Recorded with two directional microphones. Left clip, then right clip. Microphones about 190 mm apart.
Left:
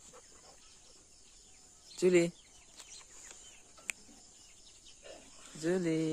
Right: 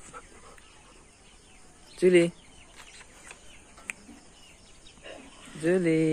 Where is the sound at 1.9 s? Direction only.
25° left (ahead or behind).